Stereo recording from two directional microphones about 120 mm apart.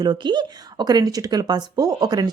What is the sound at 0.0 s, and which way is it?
Speech, 40° right (ahead or behind).